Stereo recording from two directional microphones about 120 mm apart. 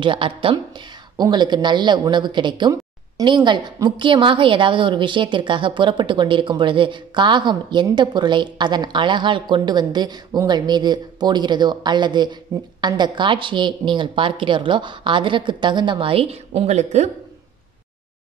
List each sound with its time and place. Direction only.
0.0 s a woman's voice: 45° right (ahead or behind)
1.1 s a woman's voice: 35° right (ahead or behind); by 17.1 s 65° right (ahead or behind)